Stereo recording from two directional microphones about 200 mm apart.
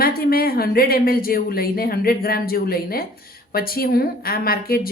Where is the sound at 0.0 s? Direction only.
50° left (ahead or behind).